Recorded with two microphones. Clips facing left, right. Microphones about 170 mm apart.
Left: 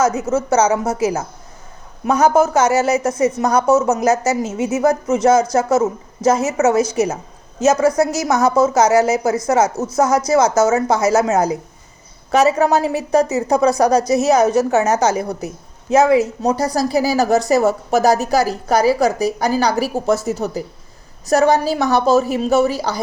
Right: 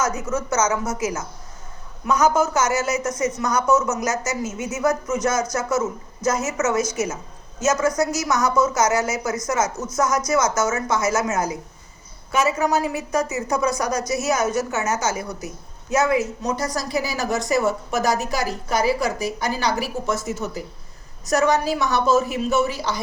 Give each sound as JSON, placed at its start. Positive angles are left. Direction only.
{"t": 0.0, "sound": "a woman's voice", "side_deg": 25}
{"t": 2.5, "sound": "a woman's voice", "side_deg": 30}